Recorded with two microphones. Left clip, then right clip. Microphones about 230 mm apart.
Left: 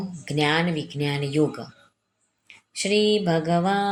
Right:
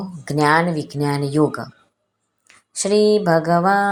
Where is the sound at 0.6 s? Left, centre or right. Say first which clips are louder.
Right 6 dB; right.